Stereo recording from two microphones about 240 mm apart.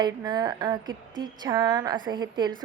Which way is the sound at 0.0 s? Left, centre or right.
Centre.